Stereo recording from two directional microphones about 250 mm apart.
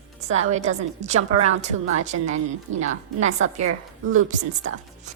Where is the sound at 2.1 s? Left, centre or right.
Right.